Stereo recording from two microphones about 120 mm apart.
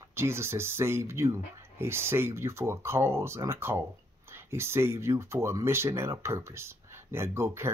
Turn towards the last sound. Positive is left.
turn(degrees=-20)  # may be behind; listen again after turning